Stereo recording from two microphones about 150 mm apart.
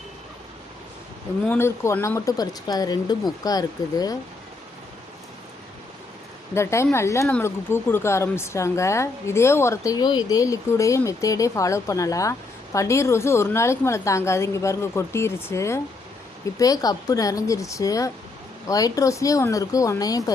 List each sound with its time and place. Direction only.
1.5 s speech: 15° left (ahead or behind)
6.5 s speech: 20° left (ahead or behind)